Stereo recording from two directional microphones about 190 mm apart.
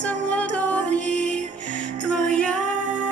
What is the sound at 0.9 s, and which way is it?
Music, 40° right (ahead or behind).